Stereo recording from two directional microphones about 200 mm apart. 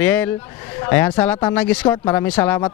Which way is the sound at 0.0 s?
10° left (ahead or behind).